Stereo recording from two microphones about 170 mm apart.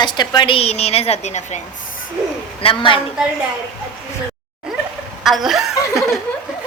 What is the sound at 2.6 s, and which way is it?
Speech, 30° left (ahead or behind).